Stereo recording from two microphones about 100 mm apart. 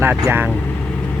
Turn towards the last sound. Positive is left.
turn(degrees=-20)  # may be behind; listen again after turning